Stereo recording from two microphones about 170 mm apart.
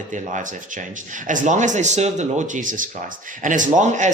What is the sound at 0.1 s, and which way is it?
Speech, 50° right (ahead or behind).